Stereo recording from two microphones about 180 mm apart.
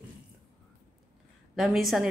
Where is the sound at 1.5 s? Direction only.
Centre (ahead or behind).